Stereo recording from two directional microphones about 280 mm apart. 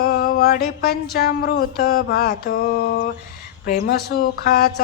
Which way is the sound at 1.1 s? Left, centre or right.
Left.